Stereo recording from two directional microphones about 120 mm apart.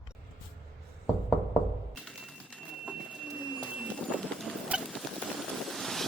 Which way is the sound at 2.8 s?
5° right (ahead or behind).